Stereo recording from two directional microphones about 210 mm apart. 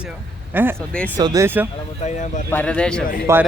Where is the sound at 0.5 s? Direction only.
10° right (ahead or behind).